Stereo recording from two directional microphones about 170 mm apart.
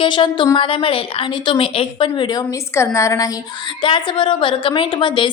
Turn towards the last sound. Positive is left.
turn(degrees=30)  # may be behind; listen again after turning